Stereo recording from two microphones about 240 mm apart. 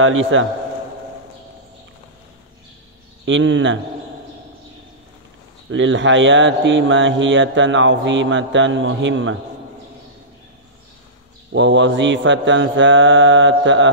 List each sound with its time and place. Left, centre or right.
0.0 s speech: right
3.3 s speech: right
5.7 s speech: right
11.5 s speech: right